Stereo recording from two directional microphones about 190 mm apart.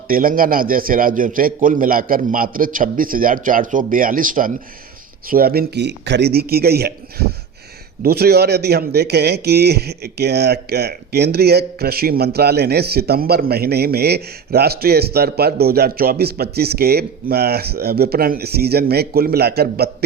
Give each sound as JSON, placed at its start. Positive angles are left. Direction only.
{"t": 0.1, "sound": "a man's voice", "side_deg": -50}